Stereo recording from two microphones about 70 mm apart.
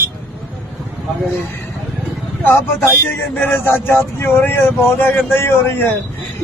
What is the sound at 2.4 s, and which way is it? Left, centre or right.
Speech, left.